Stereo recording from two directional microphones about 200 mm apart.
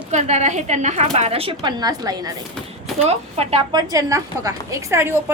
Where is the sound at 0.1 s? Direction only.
35° right (ahead or behind); by 2.3 s 20° right (ahead or behind).